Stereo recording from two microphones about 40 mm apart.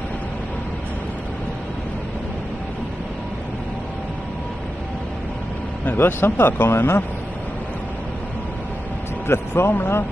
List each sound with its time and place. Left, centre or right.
5.9 s speech: left
9.3 s speech: left